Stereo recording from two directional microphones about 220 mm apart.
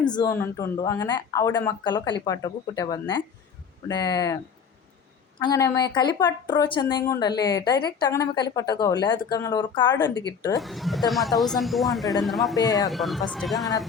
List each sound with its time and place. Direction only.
0.0 s a woman's voice: 20° left (ahead or behind)
5.4 s a woman's voice: 15° left (ahead or behind)
10.6 s speech: centre (ahead or behind)
12.5 s a woman's voice: 15° left (ahead or behind)
12.9 s speech: centre (ahead or behind)